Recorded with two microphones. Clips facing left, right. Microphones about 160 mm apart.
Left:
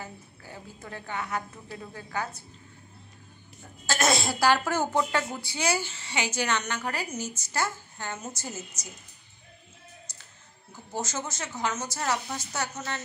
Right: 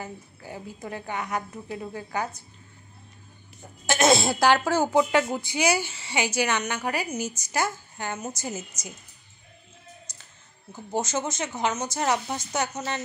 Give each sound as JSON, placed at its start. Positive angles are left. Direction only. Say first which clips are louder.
{"t": 0.0, "sound": "a woman's voice", "louder": "right 4 dB", "side_deg": -15}
{"t": 3.8, "sound": "a woman's voice", "louder": "right 5 dB", "side_deg": -20}
{"t": 10.1, "sound": "clicking", "louder": "right 1 dB", "side_deg": -20}
{"t": 10.9, "sound": "a woman's voice", "louder": "right 6 dB", "side_deg": -20}